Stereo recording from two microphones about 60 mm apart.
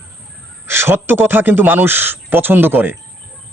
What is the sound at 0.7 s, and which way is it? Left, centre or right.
Speech, right.